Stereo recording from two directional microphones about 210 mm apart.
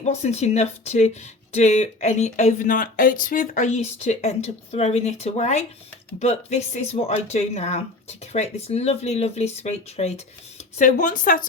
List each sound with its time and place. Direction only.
0.0 s speech: 35° left (ahead or behind)